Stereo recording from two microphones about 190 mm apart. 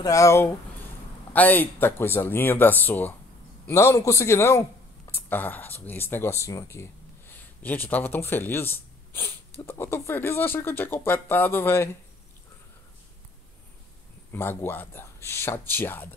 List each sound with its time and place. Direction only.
0.0 s speech: 15° left (ahead or behind)
14.3 s speech: 10° left (ahead or behind)